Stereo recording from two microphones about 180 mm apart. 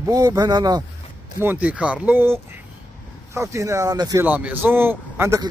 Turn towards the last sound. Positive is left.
turn(degrees=-10)  # may be behind; listen again after turning